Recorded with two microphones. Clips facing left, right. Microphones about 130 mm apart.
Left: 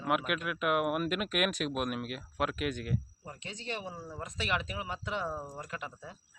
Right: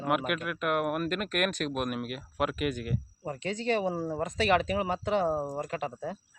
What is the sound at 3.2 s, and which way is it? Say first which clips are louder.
Speech: right 11 dB; 75° right (ahead or behind).